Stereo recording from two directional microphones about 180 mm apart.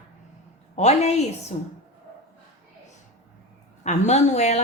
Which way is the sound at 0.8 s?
35° left (ahead or behind).